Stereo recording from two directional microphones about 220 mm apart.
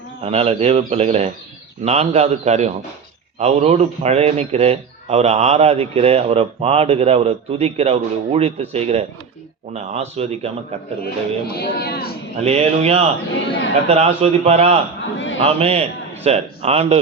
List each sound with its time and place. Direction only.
0.2 s a man's voice: 30° right (ahead or behind)
11.0 s speech: 45° left (ahead or behind)
12.4 s a man's voice: 30° right (ahead or behind)